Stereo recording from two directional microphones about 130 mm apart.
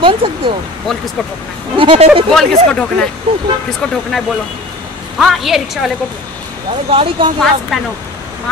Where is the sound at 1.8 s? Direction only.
45° right (ahead or behind).